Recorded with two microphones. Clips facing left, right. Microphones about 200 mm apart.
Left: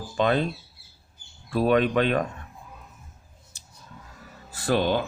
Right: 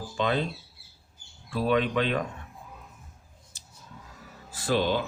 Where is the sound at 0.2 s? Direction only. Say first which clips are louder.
Left 4 dB; 55° left (ahead or behind).